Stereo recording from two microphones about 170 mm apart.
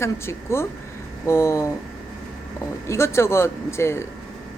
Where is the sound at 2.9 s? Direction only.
15° left (ahead or behind).